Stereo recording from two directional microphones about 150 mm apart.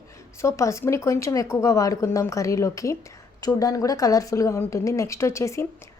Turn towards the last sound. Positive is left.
turn(degrees=20)  # may be behind; listen again after turning